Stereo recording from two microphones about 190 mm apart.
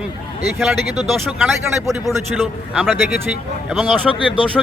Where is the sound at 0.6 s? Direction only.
Centre (ahead or behind).